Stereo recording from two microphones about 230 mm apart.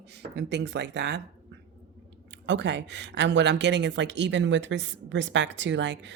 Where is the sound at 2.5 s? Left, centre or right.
Right.